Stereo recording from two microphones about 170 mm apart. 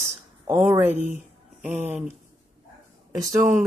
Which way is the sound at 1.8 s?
10° right (ahead or behind).